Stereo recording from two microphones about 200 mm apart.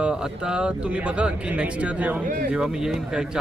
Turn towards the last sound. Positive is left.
turn(degrees=-5)  # may be behind; listen again after turning